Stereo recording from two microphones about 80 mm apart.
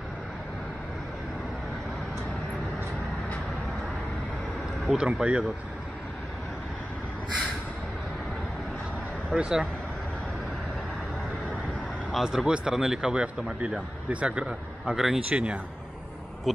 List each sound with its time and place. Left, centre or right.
4.9 s speech: centre
9.3 s speech: centre
12.1 s speech: centre
16.5 s owl: centre